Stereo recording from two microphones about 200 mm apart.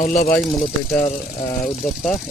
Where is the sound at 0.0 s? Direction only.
40° left (ahead or behind).